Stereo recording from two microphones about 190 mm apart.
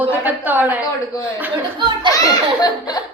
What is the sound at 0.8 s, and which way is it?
Speech, 15° left (ahead or behind).